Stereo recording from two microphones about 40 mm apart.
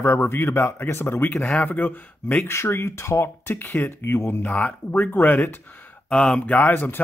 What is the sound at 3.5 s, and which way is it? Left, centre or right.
Speech, left.